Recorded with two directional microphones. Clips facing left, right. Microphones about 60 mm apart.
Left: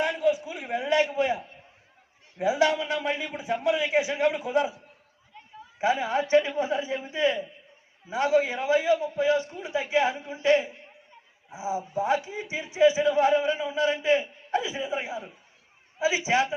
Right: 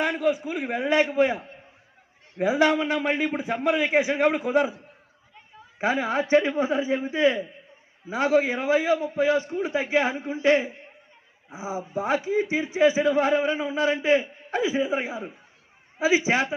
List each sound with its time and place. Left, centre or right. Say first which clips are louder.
0.2 s a man's voice: right 1 dB; right
5.8 s a man's voice: right 1 dB; right